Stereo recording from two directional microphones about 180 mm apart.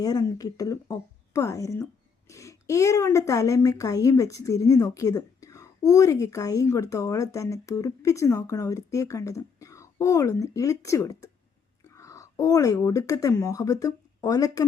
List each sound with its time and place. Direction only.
0.0 s speech: 20° left (ahead or behind)